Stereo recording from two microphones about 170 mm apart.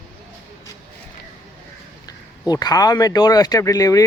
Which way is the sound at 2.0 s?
25° left (ahead or behind).